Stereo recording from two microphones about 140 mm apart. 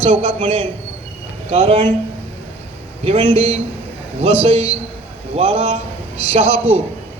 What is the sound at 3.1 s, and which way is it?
A man's voice, 40° right (ahead or behind).